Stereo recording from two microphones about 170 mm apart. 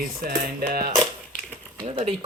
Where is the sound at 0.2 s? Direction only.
60° right (ahead or behind).